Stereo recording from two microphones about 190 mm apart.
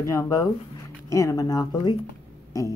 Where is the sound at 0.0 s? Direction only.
15° left (ahead or behind).